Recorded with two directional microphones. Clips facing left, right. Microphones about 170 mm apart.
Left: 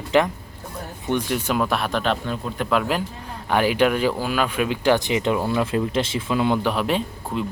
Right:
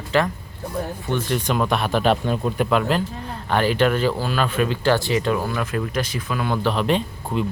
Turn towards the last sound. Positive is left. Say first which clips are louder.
# right 2 dB
turn(degrees=5)  # may be behind; listen again after turning